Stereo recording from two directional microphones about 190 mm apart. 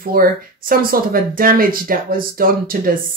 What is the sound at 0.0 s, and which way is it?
Speech, 50° right (ahead or behind).